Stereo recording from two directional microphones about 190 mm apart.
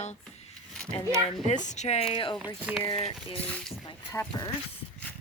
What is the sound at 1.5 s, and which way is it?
Speech, 40° left (ahead or behind).